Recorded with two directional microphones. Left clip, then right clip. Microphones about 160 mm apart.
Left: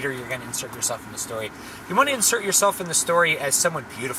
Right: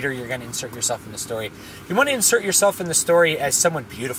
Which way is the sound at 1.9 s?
20° right (ahead or behind).